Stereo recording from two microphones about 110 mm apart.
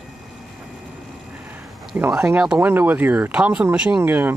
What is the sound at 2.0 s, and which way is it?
Speech, 25° right (ahead or behind).